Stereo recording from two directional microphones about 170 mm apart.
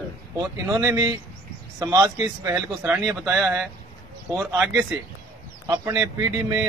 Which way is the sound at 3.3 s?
15° right (ahead or behind).